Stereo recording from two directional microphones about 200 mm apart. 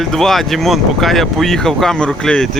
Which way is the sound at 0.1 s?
Centre (ahead or behind).